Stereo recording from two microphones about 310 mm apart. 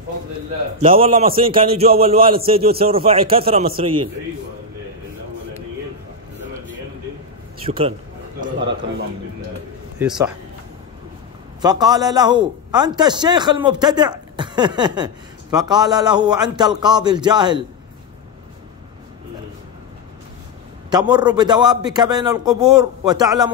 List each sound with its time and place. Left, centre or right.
0.7 s a man's voice: centre
7.6 s a man's voice: centre
9.9 s speech: centre
11.6 s a man's voice: centre
20.9 s a man's voice: centre